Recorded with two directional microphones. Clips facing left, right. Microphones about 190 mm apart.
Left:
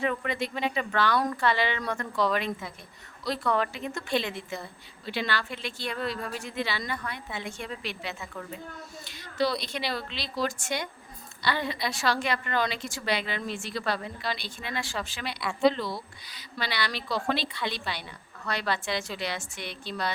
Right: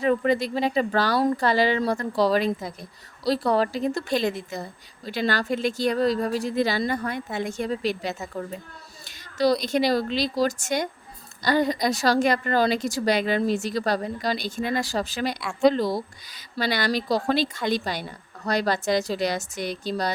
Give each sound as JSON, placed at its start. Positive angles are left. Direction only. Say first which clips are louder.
{"t": 0.0, "sound": "a woman's voice", "louder": "right 8 dB", "side_deg": -35}